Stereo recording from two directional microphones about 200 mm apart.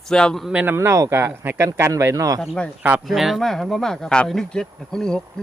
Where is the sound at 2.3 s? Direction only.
Centre (ahead or behind).